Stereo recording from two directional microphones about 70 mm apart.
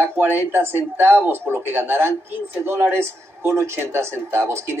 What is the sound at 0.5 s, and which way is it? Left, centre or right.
A man's voice, right.